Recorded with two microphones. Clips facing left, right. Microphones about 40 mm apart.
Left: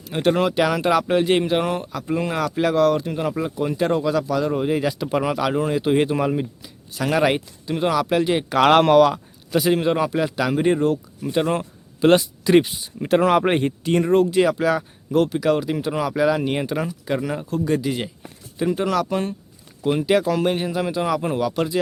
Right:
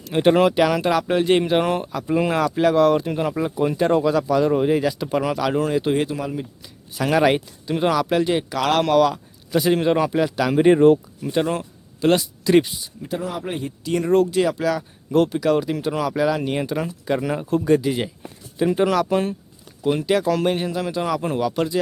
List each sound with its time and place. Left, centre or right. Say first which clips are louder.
0.1 s speech: right 3 dB; centre
6.0 s speech: left 4 dB; left
6.6 s speech: right 1 dB; centre
8.4 s speech: left 5 dB; left
8.9 s speech: left 3 dB; centre
9.5 s speech: right 1 dB; centre
10.7 s speech: right 8 dB; right
11.2 s speech: left 1 dB; centre
13.1 s speech: left 10 dB; left
14.0 s speech: even; centre
15.1 s speech: right 1 dB; centre
17.2 s speech: right 3 dB; centre
19.8 s speech: left 1 dB; centre